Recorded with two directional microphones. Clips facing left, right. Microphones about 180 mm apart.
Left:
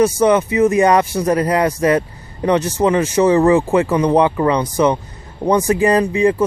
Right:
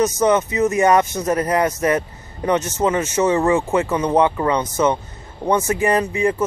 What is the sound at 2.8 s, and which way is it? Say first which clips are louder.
Speech: left 5 dB; 15° left (ahead or behind).